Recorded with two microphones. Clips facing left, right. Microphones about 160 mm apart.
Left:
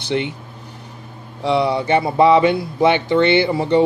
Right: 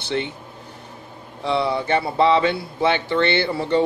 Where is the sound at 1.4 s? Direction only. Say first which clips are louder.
Left 4 dB; 15° left (ahead or behind).